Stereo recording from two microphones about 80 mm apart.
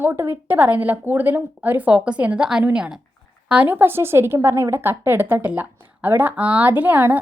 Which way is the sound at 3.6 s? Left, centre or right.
Right.